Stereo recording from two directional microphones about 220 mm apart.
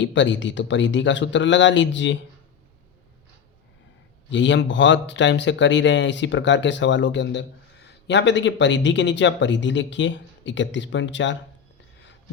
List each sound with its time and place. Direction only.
0.0 s a man's voice: 55° left (ahead or behind)
4.3 s a man's voice: 55° left (ahead or behind)